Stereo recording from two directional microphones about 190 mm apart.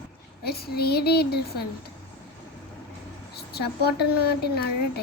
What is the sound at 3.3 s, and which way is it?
Speech, 55° left (ahead or behind).